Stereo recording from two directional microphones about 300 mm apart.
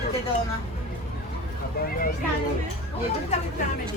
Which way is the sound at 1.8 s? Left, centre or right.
Left.